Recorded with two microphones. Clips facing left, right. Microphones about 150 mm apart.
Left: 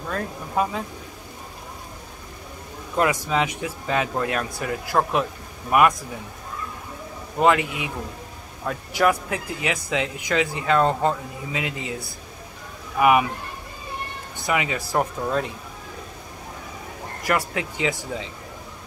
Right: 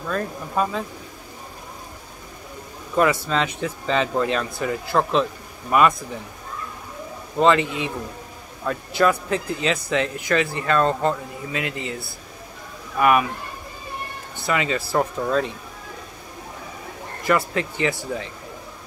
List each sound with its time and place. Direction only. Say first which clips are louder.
0.1 s speech: right 1 dB; 15° left (ahead or behind)
3.0 s speech: right 2 dB; 15° left (ahead or behind)
7.3 s speech: right 2 dB; 10° left (ahead or behind)
14.4 s speech: right 1 dB; 15° left (ahead or behind)
17.2 s speech: right 3 dB; 15° left (ahead or behind)